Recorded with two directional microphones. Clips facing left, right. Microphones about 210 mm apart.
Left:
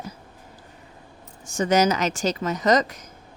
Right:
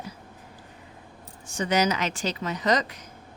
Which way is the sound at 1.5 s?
45° left (ahead or behind).